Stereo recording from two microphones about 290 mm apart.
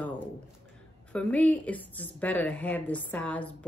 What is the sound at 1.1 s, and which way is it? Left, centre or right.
Speech, centre.